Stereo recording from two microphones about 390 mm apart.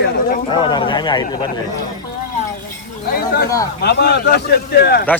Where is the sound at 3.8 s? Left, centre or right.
Left.